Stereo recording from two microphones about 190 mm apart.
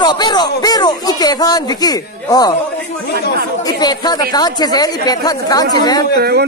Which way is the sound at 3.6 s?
20° left (ahead or behind).